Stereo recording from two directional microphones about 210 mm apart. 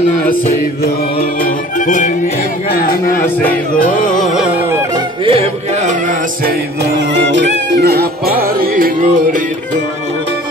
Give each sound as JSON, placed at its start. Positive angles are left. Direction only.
{"t": 1.4, "sound": "music", "side_deg": 40}
{"t": 4.4, "sound": "music", "side_deg": -10}
{"t": 5.2, "sound": "music", "side_deg": -30}
{"t": 7.2, "sound": "music", "side_deg": -60}